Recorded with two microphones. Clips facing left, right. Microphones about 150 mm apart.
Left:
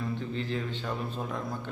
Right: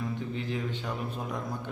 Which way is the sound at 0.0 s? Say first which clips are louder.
Left 1 dB; 10° right (ahead or behind).